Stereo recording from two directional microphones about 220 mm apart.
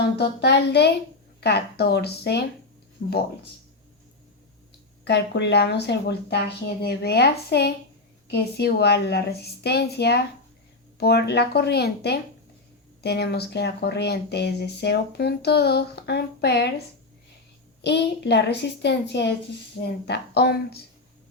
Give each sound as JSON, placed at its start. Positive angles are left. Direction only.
{"t": 0.2, "sound": "speech", "side_deg": 50}
{"t": 5.0, "sound": "speech", "side_deg": 50}
{"t": 17.8, "sound": "speech", "side_deg": 50}